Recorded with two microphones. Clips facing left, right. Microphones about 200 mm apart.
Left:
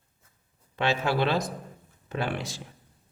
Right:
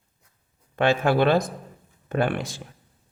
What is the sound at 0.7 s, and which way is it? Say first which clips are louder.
A man's voice: right 6 dB; 55° right (ahead or behind).